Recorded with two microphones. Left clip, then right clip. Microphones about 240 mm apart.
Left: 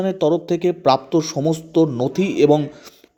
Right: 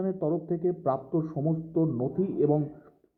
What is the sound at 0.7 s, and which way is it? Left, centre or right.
Speech, left.